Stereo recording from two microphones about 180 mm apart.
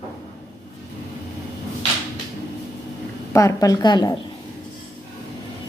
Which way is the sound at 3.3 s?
15° left (ahead or behind).